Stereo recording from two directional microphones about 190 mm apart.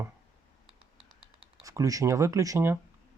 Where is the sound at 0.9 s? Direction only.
30° right (ahead or behind).